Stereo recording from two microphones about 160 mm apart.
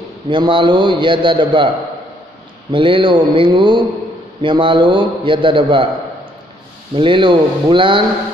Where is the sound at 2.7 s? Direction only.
30° right (ahead or behind).